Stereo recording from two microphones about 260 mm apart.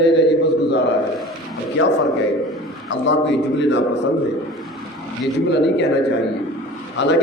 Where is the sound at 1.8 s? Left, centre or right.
Left.